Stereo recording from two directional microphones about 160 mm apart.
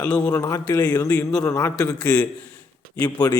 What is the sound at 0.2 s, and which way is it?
A man's voice, 15° left (ahead or behind).